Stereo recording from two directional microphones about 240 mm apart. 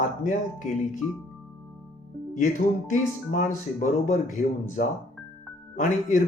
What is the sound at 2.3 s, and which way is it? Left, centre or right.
Speech, left.